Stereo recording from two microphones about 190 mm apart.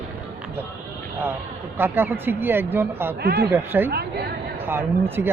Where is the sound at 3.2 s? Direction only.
55° right (ahead or behind).